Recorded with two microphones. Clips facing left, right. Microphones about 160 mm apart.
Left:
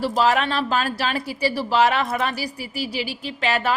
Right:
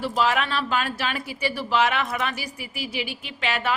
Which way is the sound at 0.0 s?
40° left (ahead or behind).